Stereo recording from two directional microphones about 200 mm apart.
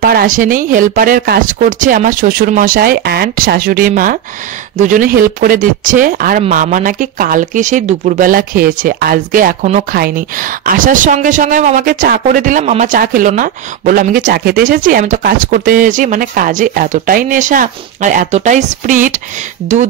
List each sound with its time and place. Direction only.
0.0 s a woman's voice: 45° right (ahead or behind)